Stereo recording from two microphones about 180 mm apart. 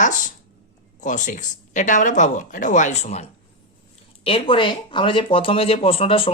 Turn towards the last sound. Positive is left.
turn(degrees=30)  # may be behind; listen again after turning